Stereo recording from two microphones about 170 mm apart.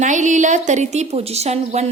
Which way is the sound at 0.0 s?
45° right (ahead or behind).